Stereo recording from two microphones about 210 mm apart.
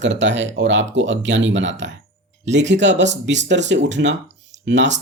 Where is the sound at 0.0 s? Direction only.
60° right (ahead or behind).